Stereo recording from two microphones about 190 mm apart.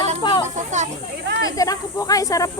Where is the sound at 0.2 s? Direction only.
25° left (ahead or behind).